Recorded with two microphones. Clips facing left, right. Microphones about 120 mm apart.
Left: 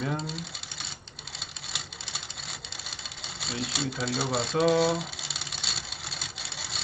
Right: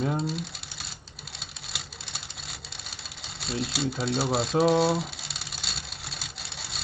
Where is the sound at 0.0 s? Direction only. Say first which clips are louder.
Right 4 dB; centre (ahead or behind).